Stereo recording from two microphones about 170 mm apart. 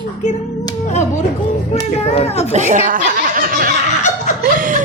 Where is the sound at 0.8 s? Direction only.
45° left (ahead or behind).